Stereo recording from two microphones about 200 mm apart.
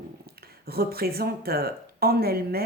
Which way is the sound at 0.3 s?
50° right (ahead or behind).